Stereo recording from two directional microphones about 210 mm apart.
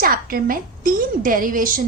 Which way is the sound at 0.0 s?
45° right (ahead or behind).